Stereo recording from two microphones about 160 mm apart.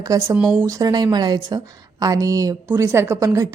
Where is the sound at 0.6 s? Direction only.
20° right (ahead or behind).